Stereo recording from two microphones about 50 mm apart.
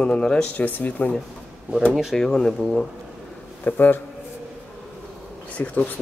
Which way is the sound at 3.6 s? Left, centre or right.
Left.